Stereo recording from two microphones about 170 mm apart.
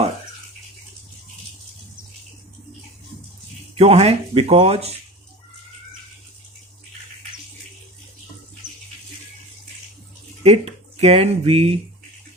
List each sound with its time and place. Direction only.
3.8 s speech: 40° right (ahead or behind)
10.4 s speech: 40° right (ahead or behind)